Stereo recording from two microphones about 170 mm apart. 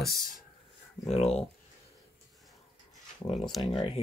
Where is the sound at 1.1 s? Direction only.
40° left (ahead or behind).